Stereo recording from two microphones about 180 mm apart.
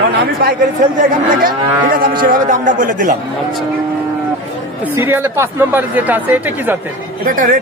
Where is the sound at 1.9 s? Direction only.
50° right (ahead or behind).